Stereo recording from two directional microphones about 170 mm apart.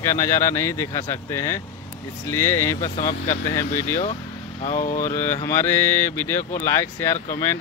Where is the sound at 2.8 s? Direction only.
50° left (ahead or behind).